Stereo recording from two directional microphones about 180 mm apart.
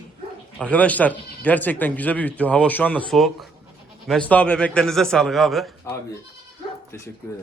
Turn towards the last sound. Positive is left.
turn(degrees=15)  # may be behind; listen again after turning